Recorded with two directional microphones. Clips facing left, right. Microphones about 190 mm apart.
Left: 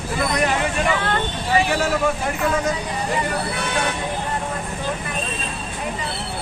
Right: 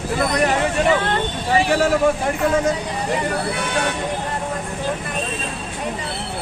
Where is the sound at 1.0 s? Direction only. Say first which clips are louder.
Right 2 dB; 25° right (ahead or behind).